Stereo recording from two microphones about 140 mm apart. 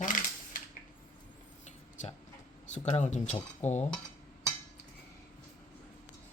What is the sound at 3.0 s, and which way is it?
Speech, 60° left (ahead or behind).